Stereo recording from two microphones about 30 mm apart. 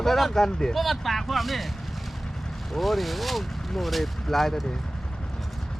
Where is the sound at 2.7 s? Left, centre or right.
Centre.